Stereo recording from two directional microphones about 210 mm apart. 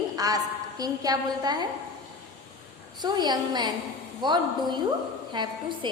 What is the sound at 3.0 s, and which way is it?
A woman's voice, 20° right (ahead or behind).